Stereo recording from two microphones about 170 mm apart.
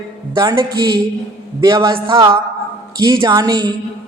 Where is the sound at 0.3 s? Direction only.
25° right (ahead or behind).